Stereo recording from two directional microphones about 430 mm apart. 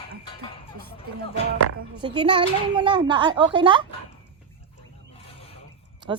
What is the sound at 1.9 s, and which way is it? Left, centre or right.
Speech, centre.